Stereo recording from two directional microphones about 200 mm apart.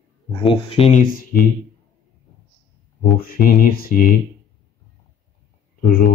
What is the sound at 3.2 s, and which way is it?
Speech, 45° left (ahead or behind).